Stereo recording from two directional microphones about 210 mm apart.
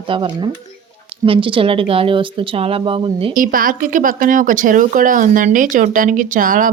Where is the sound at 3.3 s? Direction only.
40° right (ahead or behind).